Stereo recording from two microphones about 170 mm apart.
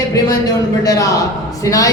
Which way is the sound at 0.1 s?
20° left (ahead or behind).